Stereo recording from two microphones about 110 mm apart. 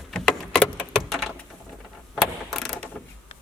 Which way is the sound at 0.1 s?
5° left (ahead or behind).